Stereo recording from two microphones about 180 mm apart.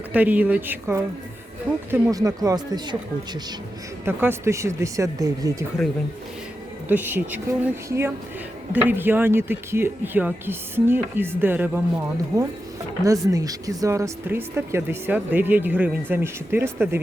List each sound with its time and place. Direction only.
0.1 s speech: 10° right (ahead or behind)
4.0 s speech: 15° right (ahead or behind)
6.8 s speech: 10° right (ahead or behind)